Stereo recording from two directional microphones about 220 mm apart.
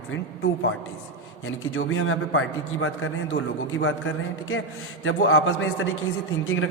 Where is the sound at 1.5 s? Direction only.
65° left (ahead or behind).